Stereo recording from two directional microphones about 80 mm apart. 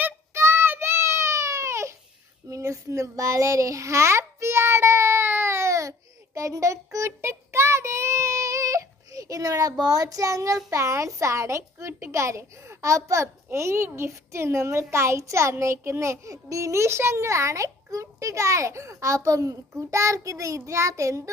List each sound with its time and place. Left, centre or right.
0.0 s a sound: right
2.5 s child singing: right
10.7 s a woman's voice: right